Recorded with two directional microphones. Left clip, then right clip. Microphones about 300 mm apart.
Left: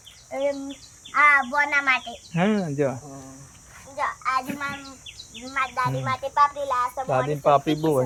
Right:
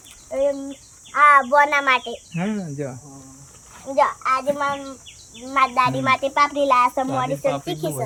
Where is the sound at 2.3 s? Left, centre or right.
Centre.